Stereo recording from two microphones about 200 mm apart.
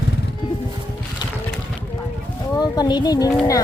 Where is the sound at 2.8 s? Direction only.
20° left (ahead or behind).